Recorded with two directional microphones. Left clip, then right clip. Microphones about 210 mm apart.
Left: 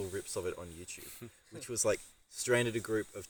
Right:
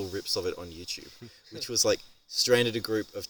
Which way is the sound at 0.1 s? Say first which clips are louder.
Right 7 dB; 55° right (ahead or behind).